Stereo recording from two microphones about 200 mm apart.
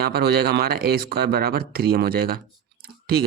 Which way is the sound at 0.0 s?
50° right (ahead or behind).